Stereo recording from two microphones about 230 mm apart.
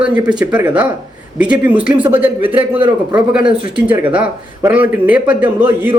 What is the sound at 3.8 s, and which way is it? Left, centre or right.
Speech, centre.